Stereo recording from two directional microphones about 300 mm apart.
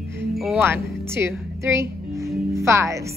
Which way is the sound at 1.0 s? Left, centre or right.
Centre.